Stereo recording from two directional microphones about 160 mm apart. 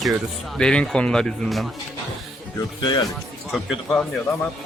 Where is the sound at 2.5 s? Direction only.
25° left (ahead or behind).